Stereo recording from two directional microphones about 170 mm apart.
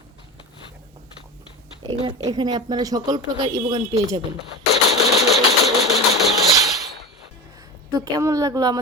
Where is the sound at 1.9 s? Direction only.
30° right (ahead or behind).